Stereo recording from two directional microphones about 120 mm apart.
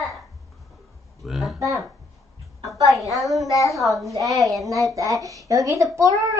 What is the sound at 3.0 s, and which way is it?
Speech, centre (ahead or behind).